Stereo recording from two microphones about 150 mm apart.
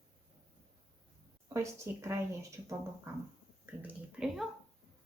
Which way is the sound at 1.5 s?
20° right (ahead or behind).